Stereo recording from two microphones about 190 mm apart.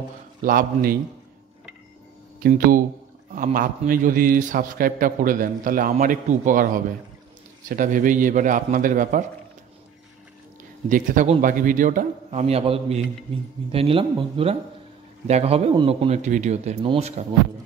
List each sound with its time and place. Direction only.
0.4 s a man's voice: 50° right (ahead or behind)
2.4 s a man's voice: 45° right (ahead or behind)
10.9 s a man's voice: 45° right (ahead or behind)